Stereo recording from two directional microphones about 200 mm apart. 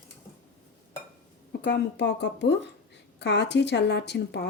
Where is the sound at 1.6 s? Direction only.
55° left (ahead or behind).